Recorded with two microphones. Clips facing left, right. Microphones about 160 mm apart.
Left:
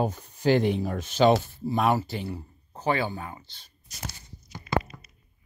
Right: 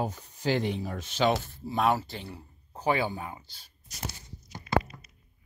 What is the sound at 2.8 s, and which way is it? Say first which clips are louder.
Speech: left 1 dB; 15° right (ahead or behind).